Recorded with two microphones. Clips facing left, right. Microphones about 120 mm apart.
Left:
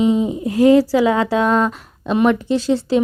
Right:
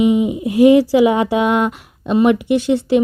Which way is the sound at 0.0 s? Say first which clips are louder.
Right 2 dB; 15° right (ahead or behind).